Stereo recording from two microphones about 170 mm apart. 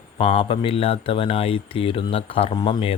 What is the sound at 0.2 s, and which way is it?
Speech, 30° left (ahead or behind).